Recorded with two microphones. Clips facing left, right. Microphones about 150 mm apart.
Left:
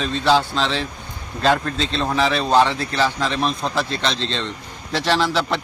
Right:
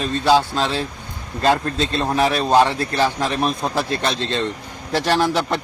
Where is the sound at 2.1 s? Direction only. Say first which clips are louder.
Right 1 dB; 15° right (ahead or behind).